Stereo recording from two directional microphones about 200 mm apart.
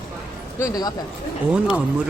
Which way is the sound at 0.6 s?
15° left (ahead or behind).